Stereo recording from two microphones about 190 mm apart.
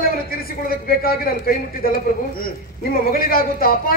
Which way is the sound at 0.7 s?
50° left (ahead or behind).